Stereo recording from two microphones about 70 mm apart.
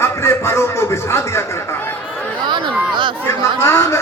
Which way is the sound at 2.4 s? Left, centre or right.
Right.